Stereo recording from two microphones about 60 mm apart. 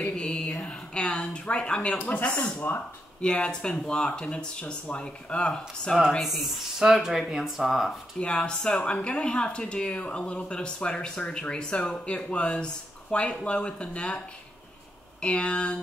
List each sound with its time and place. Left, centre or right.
0.1 s a sound: centre
1.3 s speech: centre
2.0 s speech: left
3.2 s speech: centre
6.8 s speech: centre
8.2 s speech: centre
15.2 s speech: centre